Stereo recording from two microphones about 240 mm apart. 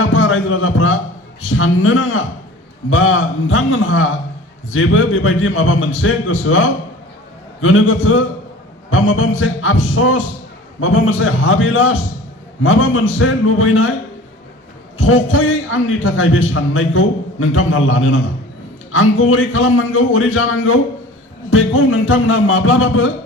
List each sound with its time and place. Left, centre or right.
0.1 s a sound: left
1.5 s a man's voice: left
14.9 s a man's voice: left